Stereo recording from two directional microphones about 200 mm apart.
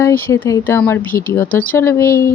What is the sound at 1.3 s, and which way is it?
Speech, 10° left (ahead or behind).